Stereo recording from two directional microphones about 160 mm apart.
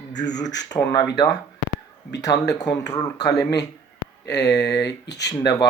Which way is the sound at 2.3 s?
30° left (ahead or behind).